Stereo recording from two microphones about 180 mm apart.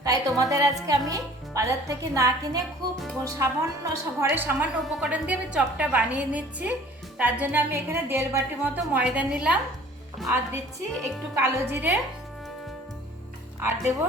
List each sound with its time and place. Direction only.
0.0 s a woman's voice: 20° right (ahead or behind)
11.3 s a woman's voice: 10° right (ahead or behind)
13.6 s a woman's voice: 15° right (ahead or behind)